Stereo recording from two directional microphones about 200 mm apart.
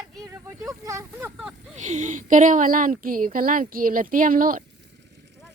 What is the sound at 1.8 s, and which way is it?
A woman's voice, 35° right (ahead or behind).